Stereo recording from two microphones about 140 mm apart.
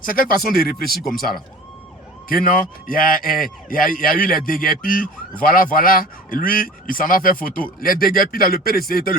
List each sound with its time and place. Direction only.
0.0 s speech: 90° left
2.3 s speech: 90° left